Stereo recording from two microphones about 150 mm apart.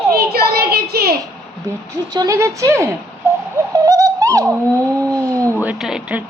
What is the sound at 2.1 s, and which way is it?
Speech, 25° right (ahead or behind).